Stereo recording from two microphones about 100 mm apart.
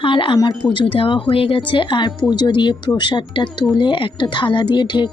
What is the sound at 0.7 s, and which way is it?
Speech, 60° left (ahead or behind).